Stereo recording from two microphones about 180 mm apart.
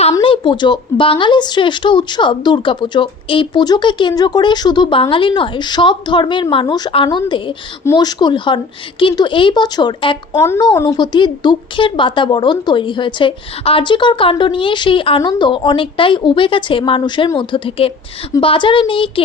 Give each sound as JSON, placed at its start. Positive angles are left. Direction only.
{"t": 0.2, "sound": "a woman's voice", "side_deg": 30}